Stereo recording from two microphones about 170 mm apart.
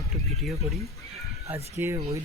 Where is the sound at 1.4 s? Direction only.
10° right (ahead or behind).